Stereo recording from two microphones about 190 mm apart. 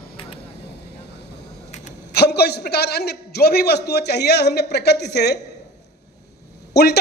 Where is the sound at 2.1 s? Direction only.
60° left (ahead or behind).